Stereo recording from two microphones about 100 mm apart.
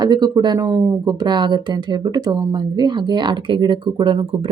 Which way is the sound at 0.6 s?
35° right (ahead or behind).